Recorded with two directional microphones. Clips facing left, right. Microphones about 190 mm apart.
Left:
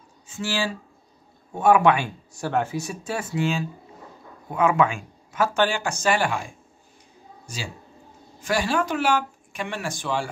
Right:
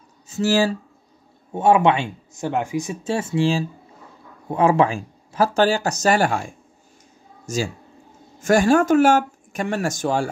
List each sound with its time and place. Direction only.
0.3 s speech: 40° right (ahead or behind)
1.5 s speech: 25° right (ahead or behind); by 6.4 s 45° right (ahead or behind)
7.4 s speech: 45° right (ahead or behind)